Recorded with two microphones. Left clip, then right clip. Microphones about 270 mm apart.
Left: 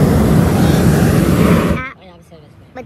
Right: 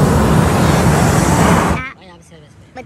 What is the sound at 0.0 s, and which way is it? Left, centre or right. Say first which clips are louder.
Vehicle: right 1 dB; right.